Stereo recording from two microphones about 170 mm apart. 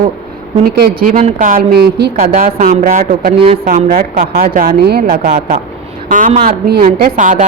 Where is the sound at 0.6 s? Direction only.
60° right (ahead or behind).